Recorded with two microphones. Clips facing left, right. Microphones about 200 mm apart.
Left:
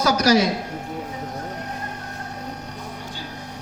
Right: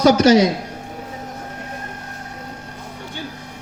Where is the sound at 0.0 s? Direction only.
25° right (ahead or behind).